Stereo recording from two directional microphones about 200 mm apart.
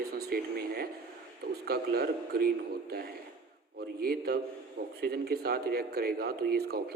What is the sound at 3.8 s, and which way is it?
Speech, 50° right (ahead or behind).